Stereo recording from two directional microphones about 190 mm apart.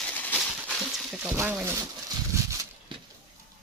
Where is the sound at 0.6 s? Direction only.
5° right (ahead or behind).